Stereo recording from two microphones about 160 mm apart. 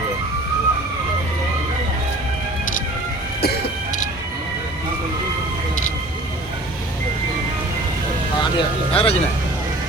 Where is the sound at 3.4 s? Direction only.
90° left.